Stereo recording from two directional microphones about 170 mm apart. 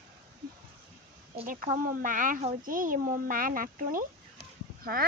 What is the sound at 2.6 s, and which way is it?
Speech, 55° right (ahead or behind).